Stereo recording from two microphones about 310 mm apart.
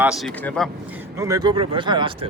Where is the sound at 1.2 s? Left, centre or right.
Centre.